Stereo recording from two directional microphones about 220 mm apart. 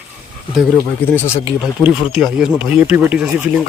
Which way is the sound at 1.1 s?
10° left (ahead or behind).